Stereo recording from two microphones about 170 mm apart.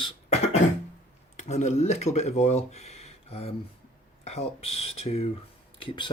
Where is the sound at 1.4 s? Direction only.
45° left (ahead or behind).